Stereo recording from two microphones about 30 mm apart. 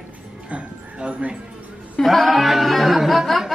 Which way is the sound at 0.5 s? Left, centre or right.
Right.